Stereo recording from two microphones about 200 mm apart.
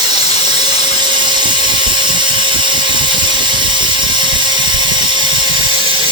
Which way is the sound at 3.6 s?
25° right (ahead or behind).